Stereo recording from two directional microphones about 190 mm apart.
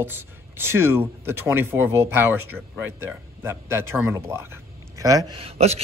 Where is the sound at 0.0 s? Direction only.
10° right (ahead or behind).